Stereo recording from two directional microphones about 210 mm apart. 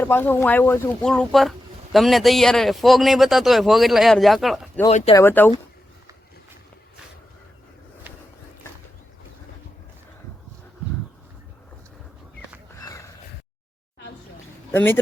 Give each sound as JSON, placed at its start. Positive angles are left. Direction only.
{"t": 0.0, "sound": "speech", "side_deg": 10}
{"t": 4.9, "sound": "speech", "side_deg": 30}
{"t": 5.1, "sound": "speech", "side_deg": 10}
{"t": 8.1, "sound": "a sound", "side_deg": -10}
{"t": 12.8, "sound": "a sound", "side_deg": 15}
{"t": 14.7, "sound": "speech", "side_deg": 10}